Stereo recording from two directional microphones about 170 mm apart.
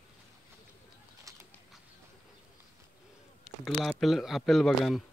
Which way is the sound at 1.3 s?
20° right (ahead or behind).